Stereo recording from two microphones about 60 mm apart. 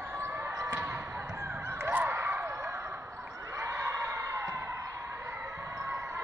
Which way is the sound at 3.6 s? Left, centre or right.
Right.